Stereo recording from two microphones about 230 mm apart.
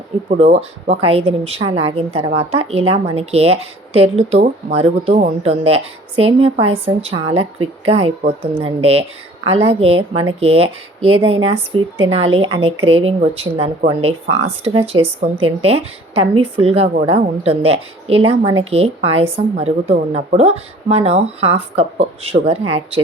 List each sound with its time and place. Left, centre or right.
0.3 s speech: right